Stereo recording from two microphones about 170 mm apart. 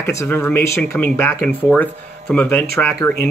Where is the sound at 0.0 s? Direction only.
15° left (ahead or behind).